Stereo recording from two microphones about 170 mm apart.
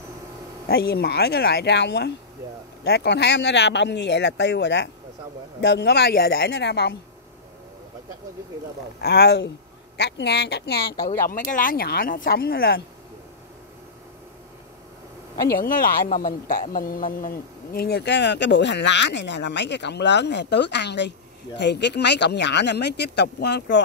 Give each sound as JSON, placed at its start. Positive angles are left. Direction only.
{"t": 0.7, "sound": "speech", "side_deg": 70}
{"t": 9.0, "sound": "speech", "side_deg": 75}
{"t": 15.5, "sound": "speech", "side_deg": 55}